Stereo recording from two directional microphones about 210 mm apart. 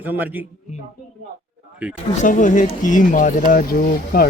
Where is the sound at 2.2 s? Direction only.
35° left (ahead or behind).